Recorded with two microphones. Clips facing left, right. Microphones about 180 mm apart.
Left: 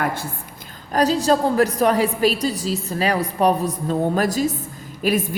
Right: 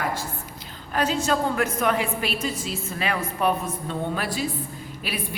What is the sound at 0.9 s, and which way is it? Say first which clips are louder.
A woman's voice: left 6 dB; 35° left (ahead or behind).